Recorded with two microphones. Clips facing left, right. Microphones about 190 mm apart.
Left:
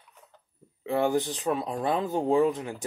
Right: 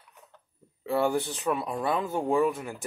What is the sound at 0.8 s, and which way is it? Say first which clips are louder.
Speech: left 1 dB; 20° left (ahead or behind).